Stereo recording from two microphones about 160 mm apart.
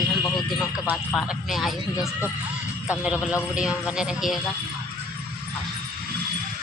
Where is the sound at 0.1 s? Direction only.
25° left (ahead or behind).